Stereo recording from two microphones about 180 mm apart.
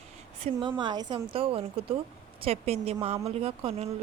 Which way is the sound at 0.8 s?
25° right (ahead or behind).